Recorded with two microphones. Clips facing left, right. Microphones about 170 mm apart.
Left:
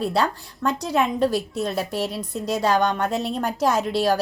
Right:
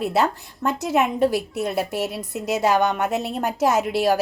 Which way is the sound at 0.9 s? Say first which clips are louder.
Right 2 dB; 5° right (ahead or behind).